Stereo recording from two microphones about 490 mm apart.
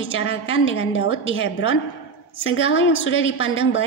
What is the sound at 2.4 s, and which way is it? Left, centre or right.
A woman's voice, left.